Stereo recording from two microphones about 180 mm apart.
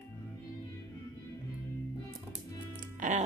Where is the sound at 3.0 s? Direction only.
45° right (ahead or behind).